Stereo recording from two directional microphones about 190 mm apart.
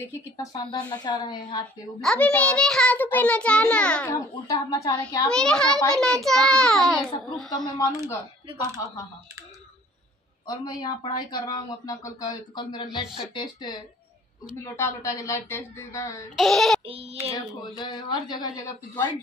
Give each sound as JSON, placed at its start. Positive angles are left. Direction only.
{"t": 0.0, "sound": "speech", "side_deg": 15}
{"t": 2.0, "sound": "a child's voice", "side_deg": 5}
{"t": 4.1, "sound": "speech", "side_deg": 20}
{"t": 5.3, "sound": "a child's voice", "side_deg": 5}
{"t": 7.4, "sound": "a child's voice", "side_deg": 20}
{"t": 10.4, "sound": "a child's voice", "side_deg": 20}
{"t": 16.3, "sound": "a child's voice", "side_deg": 0}
{"t": 16.8, "sound": "child singing", "side_deg": -30}
{"t": 17.3, "sound": "speech", "side_deg": 25}